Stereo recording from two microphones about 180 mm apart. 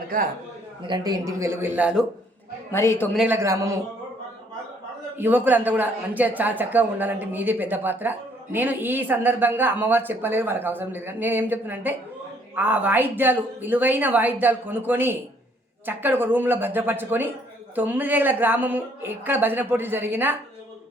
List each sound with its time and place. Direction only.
0.1 s a man's voice: 50° right (ahead or behind)
0.8 s speech: 25° right (ahead or behind); by 2.0 s 5° right (ahead or behind)
2.7 s a man's voice: 15° left (ahead or behind)
3.2 s speech: 15° right (ahead or behind)
5.1 s speech: 10° right (ahead or behind)